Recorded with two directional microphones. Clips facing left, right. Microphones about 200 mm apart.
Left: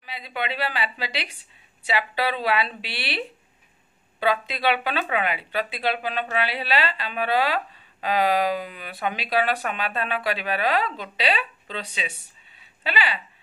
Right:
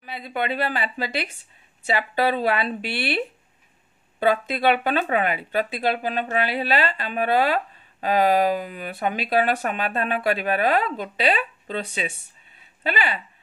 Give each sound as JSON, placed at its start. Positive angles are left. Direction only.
{"t": 0.0, "sound": "speech", "side_deg": -50}